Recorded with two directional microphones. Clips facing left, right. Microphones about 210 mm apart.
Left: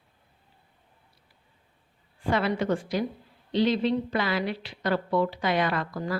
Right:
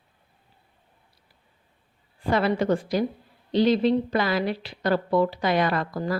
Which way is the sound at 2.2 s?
35° right (ahead or behind).